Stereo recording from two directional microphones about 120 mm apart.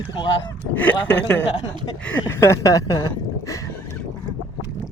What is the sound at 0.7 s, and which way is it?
Speech, 15° left (ahead or behind).